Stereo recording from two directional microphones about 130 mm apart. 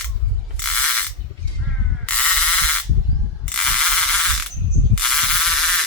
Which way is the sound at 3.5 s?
5° left (ahead or behind).